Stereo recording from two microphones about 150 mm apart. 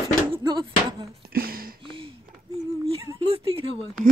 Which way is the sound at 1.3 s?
75° right (ahead or behind).